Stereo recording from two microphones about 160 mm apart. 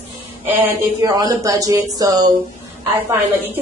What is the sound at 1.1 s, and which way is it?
A woman's voice, 25° right (ahead or behind).